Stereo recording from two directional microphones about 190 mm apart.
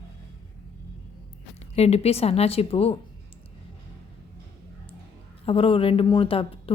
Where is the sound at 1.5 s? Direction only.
35° left (ahead or behind).